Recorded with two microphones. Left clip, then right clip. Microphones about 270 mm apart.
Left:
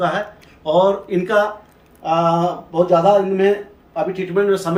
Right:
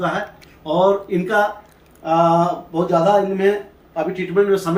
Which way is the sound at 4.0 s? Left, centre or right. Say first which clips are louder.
Right 1 dB; left.